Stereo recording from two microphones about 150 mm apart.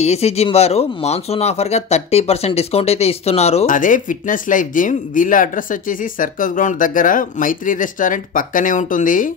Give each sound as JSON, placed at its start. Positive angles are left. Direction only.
{"t": 0.0, "sound": "speech", "side_deg": 45}
{"t": 3.6, "sound": "speech", "side_deg": 60}